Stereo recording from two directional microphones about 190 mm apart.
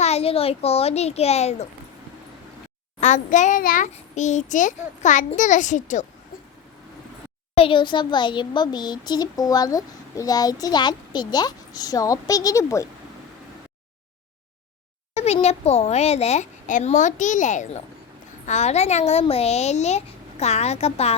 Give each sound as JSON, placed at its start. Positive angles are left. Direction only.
{"t": 0.0, "sound": "a child's voice", "side_deg": 35}
{"t": 3.0, "sound": "a child's voice", "side_deg": 40}
{"t": 7.5, "sound": "a child's voice", "side_deg": 30}
{"t": 15.1, "sound": "a child's voice", "side_deg": 35}